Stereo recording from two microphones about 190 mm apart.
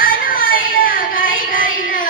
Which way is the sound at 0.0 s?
50° left (ahead or behind).